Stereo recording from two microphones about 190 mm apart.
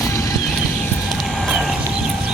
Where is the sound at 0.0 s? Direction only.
15° left (ahead or behind).